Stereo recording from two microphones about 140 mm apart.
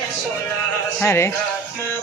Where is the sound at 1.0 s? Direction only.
20° left (ahead or behind).